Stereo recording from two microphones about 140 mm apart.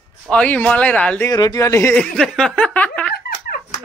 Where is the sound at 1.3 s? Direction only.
25° left (ahead or behind).